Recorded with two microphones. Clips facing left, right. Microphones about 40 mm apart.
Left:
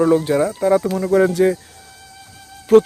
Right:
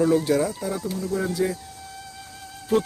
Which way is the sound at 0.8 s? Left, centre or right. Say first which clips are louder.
Left 11 dB; left.